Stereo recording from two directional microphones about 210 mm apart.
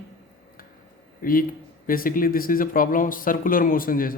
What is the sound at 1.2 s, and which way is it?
Speech, 40° left (ahead or behind).